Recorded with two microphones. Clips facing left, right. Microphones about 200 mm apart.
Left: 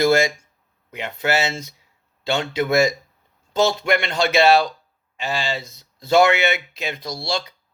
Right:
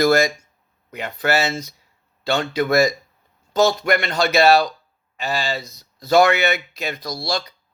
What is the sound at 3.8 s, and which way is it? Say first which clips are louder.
Speech: right 1 dB; 40° right (ahead or behind).